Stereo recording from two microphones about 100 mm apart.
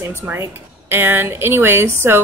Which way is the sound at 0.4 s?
20° right (ahead or behind).